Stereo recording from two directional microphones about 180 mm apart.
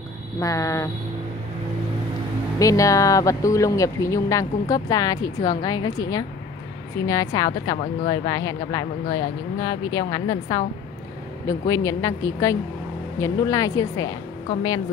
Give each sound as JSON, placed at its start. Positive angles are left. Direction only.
{"t": 0.4, "sound": "speech", "side_deg": 20}
{"t": 2.6, "sound": "speech", "side_deg": 20}